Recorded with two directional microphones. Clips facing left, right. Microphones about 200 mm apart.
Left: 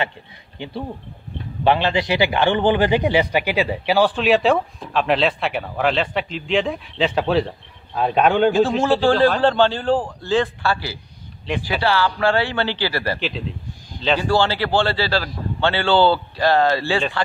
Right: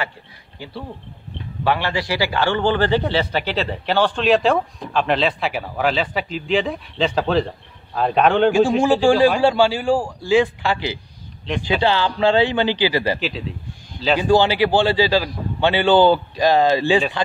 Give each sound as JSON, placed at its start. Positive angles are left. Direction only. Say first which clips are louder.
{"t": 1.6, "sound": "a man's voice", "louder": "left 3 dB", "side_deg": 25}
{"t": 8.5, "sound": "a man's voice", "louder": "right 1 dB", "side_deg": -15}
{"t": 13.2, "sound": "a man's voice", "louder": "even", "side_deg": 0}
{"t": 14.0, "sound": "a man's voice", "louder": "right 3 dB", "side_deg": -15}